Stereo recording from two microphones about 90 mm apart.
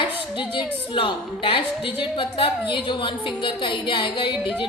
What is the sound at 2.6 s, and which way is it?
Music, 65° left (ahead or behind).